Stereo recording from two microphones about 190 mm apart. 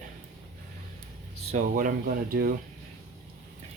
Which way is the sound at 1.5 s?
45° right (ahead or behind).